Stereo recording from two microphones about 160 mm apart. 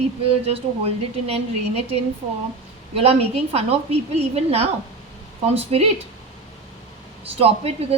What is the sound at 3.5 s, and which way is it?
A woman's voice, 40° right (ahead or behind).